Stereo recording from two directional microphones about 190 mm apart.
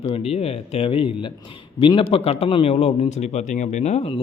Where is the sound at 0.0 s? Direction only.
30° left (ahead or behind).